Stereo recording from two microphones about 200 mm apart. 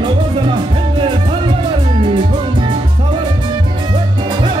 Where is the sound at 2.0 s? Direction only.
25° right (ahead or behind).